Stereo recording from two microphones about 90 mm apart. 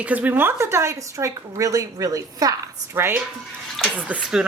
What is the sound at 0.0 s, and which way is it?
Speech, 15° right (ahead or behind).